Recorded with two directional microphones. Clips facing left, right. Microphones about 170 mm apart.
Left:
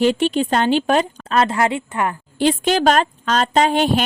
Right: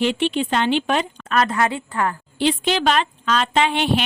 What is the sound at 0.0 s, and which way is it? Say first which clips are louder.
A woman's voice: left 4 dB; 40° left (ahead or behind).